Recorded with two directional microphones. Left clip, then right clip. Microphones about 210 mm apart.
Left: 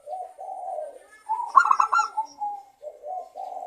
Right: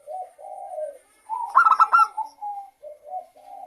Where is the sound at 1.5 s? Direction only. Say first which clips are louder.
Right 3 dB; 15° right (ahead or behind).